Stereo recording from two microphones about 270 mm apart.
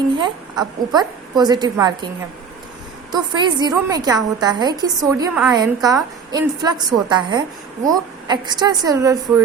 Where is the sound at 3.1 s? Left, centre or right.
Centre.